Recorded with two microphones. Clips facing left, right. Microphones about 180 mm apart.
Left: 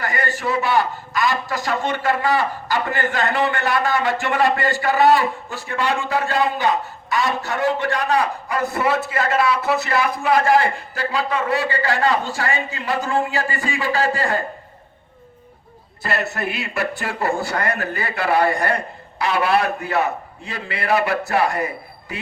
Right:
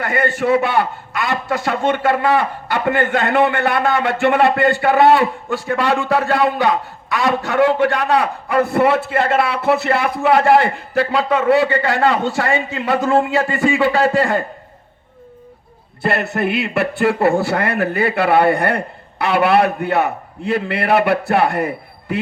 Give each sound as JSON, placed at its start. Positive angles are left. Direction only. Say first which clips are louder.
{"t": 0.0, "sound": "a man's voice", "louder": "right 6 dB", "side_deg": -60}
{"t": 16.0, "sound": "a man's voice", "louder": "right 6 dB", "side_deg": -60}